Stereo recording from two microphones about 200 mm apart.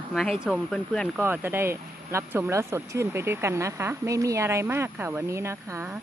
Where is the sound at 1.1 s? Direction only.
10° right (ahead or behind).